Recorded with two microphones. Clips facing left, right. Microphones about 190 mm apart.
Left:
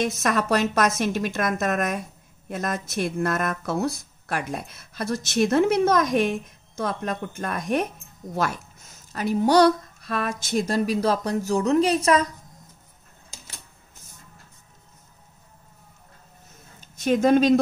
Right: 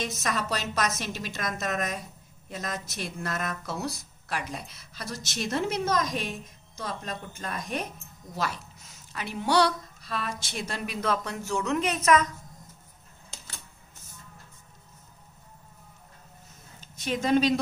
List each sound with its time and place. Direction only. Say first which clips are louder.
0.0 s speech: left 7 dB; 55° left (ahead or behind); by 12.3 s 35° left (ahead or behind)
16.8 s speech: left 9 dB; 50° left (ahead or behind)